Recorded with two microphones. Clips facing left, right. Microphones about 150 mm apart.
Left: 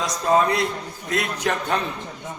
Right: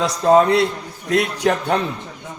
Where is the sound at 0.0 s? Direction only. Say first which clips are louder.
Right 6 dB; 65° right (ahead or behind).